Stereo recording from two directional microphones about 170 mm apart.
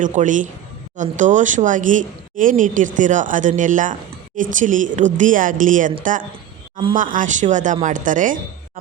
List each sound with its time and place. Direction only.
0.0 s speech: 50° right (ahead or behind)
6.9 s speech: 50° right (ahead or behind)